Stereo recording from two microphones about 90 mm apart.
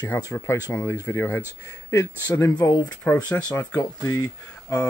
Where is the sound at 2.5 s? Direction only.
50° left (ahead or behind).